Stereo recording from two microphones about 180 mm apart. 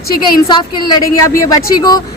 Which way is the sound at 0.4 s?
20° left (ahead or behind).